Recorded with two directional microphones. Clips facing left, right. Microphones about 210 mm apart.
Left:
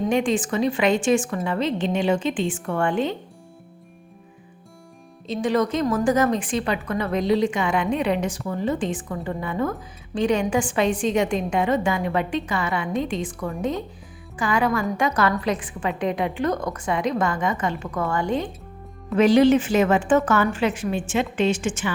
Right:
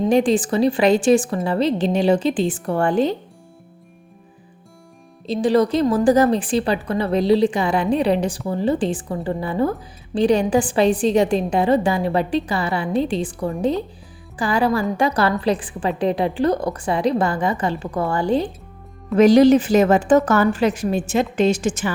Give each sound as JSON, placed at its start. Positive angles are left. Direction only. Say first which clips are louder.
{"t": 0.0, "sound": "a woman's voice", "louder": "right 5 dB", "side_deg": -35}
{"t": 5.2, "sound": "a woman's voice", "louder": "right 5 dB", "side_deg": -35}